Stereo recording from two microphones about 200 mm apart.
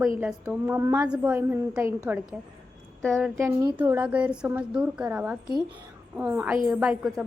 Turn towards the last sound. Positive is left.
turn(degrees=0)  # may be behind; listen again after turning